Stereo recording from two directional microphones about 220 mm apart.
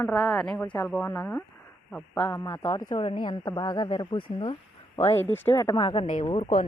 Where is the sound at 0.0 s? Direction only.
5° left (ahead or behind); by 4.5 s 20° left (ahead or behind).